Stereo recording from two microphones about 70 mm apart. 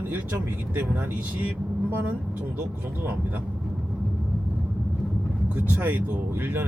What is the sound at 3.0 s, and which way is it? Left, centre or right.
Speech, right.